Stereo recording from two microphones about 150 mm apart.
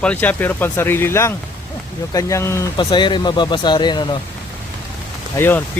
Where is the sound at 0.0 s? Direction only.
10° left (ahead or behind).